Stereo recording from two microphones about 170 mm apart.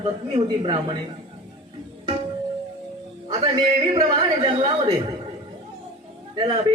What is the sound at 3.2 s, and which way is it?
Speech, 25° right (ahead or behind).